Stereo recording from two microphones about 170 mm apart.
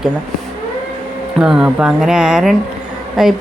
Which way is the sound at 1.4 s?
5° right (ahead or behind).